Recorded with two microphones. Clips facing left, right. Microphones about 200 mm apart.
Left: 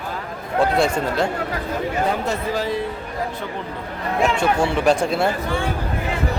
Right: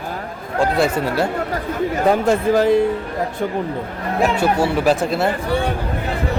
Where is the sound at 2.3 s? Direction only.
50° right (ahead or behind).